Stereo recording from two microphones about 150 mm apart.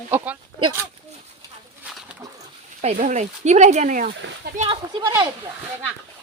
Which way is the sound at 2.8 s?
55° right (ahead or behind).